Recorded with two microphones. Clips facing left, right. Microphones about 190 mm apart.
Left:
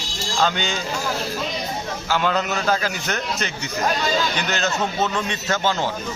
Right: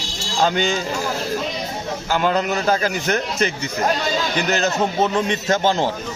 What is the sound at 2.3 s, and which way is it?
Speech, 15° right (ahead or behind).